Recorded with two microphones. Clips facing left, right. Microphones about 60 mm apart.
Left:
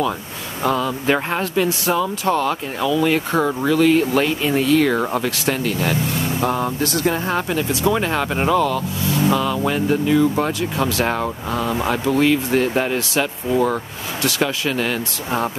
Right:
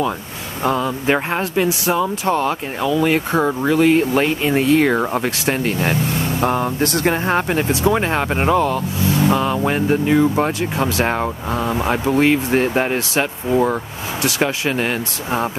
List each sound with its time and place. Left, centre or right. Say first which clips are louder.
0.7 s speech: right 1 dB; centre
6.8 s speech: right 2 dB; right
7.8 s speech: even; right